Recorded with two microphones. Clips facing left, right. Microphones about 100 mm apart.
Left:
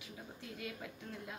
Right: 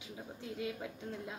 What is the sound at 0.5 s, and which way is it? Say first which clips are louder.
Speech: right 6 dB; 25° right (ahead or behind).